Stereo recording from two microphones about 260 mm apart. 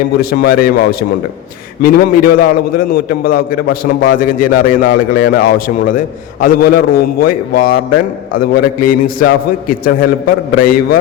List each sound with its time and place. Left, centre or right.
0.2 s a man's voice: left